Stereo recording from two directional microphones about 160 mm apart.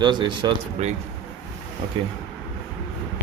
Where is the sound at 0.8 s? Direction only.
45° right (ahead or behind).